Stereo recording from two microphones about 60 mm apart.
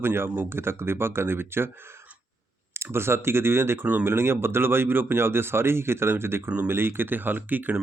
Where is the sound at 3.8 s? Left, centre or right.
Right.